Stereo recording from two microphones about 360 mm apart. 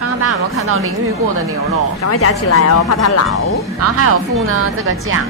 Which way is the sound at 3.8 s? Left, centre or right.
Right.